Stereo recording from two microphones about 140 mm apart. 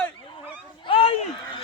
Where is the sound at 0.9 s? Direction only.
40° left (ahead or behind).